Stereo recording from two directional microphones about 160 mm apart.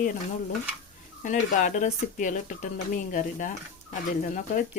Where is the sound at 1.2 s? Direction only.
55° left (ahead or behind).